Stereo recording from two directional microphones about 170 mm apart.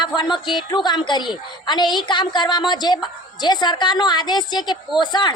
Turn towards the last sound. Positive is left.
turn(degrees=25)  # may be behind; listen again after turning